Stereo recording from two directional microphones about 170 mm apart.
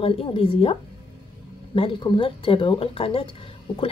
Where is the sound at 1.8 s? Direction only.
30° left (ahead or behind).